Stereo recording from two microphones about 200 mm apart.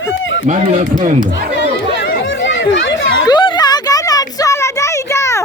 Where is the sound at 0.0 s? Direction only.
70° left (ahead or behind).